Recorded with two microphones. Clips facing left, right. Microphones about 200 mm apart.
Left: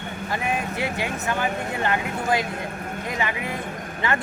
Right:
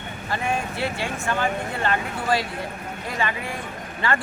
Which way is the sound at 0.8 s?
15° left (ahead or behind).